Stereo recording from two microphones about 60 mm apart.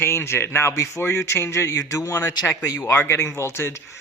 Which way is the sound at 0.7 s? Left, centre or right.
Left.